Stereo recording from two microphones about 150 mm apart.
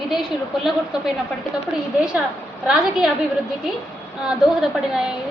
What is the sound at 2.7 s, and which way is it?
Speech, 5° right (ahead or behind).